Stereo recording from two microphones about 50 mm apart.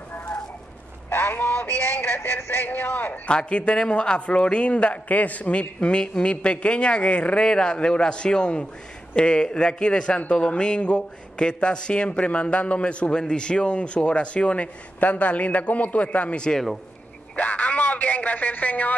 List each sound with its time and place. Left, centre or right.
1.1 s a sound: left
1.9 s speech: left
3.3 s a man's voice: left
17.4 s speech: left